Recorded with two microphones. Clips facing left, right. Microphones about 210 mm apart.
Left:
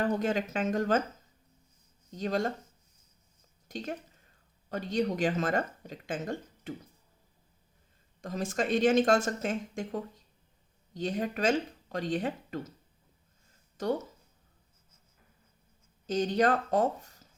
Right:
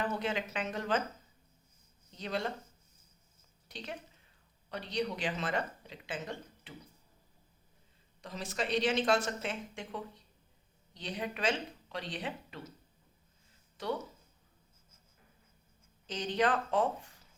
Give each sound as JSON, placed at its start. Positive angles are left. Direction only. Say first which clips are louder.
{"t": 0.0, "sound": "speech", "louder": "left 6 dB", "side_deg": 45}
{"t": 2.0, "sound": "speech", "louder": "left 6 dB", "side_deg": 45}
{"t": 3.7, "sound": "speech", "louder": "left 7 dB", "side_deg": 45}
{"t": 8.2, "sound": "speech", "louder": "left 6 dB", "side_deg": 45}
{"t": 13.8, "sound": "speech", "louder": "left 6 dB", "side_deg": 45}
{"t": 16.0, "sound": "speech", "louder": "left 5 dB", "side_deg": 45}